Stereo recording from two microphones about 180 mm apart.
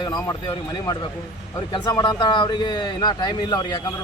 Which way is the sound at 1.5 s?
20° left (ahead or behind).